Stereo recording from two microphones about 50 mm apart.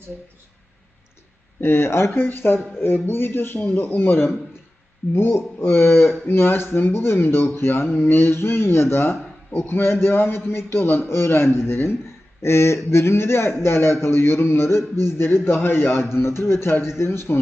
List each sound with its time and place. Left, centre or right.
1.6 s a man's voice: left
12.4 s a man's voice: left
16.1 s a man's voice: left